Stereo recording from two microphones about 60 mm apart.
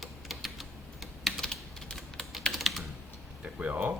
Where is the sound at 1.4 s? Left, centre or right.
Centre.